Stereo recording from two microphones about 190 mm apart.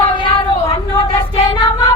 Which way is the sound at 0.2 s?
30° left (ahead or behind).